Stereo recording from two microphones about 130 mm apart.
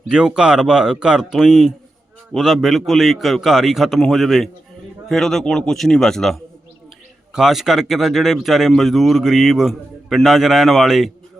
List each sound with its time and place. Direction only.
0.1 s speech: 5° right (ahead or behind)